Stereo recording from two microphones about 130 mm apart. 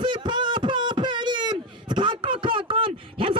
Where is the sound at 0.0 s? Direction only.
35° right (ahead or behind).